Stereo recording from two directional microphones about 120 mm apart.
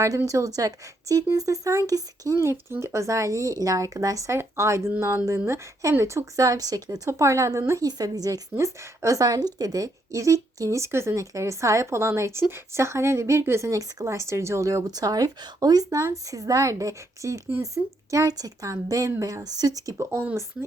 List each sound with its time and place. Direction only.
0.0 s a woman's voice: 25° right (ahead or behind)